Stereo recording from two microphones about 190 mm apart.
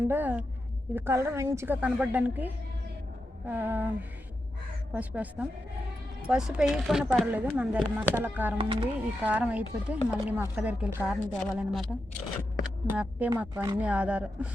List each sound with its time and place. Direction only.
0.1 s a woman's voice: 10° right (ahead or behind)
4.9 s a woman's voice: 5° right (ahead or behind)
8.5 s speech: 30° right (ahead or behind)
9.0 s a woman's voice: 5° right (ahead or behind)
13.0 s a woman's voice: 10° right (ahead or behind)
13.5 s speech: 20° right (ahead or behind)
13.7 s a woman's voice: 5° right (ahead or behind)